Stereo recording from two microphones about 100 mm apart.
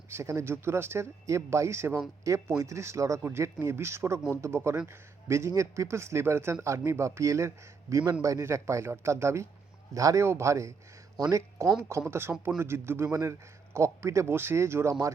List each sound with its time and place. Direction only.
0.1 s speech: 30° right (ahead or behind)